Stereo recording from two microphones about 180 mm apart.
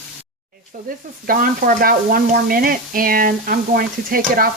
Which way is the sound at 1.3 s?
50° right (ahead or behind).